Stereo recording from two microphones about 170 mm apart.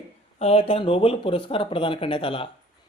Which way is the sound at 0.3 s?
35° left (ahead or behind).